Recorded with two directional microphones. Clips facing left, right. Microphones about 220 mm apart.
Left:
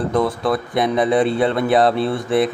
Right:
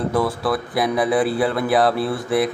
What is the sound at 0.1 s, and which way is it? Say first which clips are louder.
Speech: left 3 dB; 5° right (ahead or behind).